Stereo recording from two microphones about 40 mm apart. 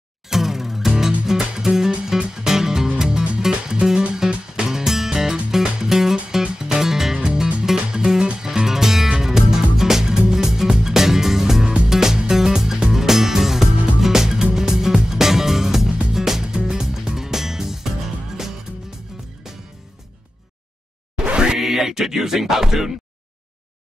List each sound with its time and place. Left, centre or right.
0.3 s music: centre
11.6 s music: right
11.9 s music: centre
21.3 s music: right
21.5 s music: centre